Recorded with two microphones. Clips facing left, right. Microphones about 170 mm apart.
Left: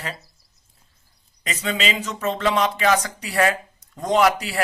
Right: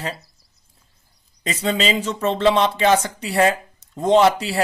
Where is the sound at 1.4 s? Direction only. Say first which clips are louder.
Right 4 dB; 30° right (ahead or behind).